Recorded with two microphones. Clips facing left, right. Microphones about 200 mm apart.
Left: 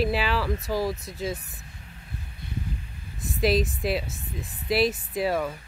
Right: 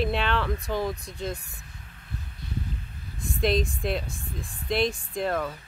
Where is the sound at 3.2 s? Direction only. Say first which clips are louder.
Left 2 dB; 5° left (ahead or behind).